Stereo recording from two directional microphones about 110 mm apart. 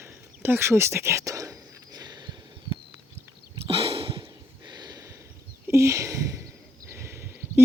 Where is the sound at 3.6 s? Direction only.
60° right (ahead or behind).